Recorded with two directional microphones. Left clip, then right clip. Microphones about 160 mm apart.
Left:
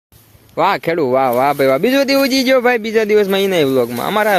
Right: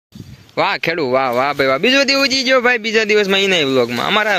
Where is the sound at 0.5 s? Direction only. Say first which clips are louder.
Left 2 dB; 10° left (ahead or behind).